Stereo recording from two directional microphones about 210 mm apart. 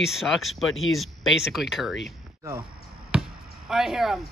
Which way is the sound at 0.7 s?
70° left (ahead or behind).